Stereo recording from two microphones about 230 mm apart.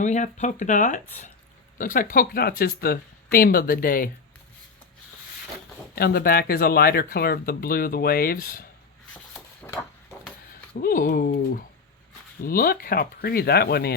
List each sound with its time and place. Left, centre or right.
0.0 s speech: left
5.9 s speech: left
9.1 s a sound: centre
10.8 s speech: left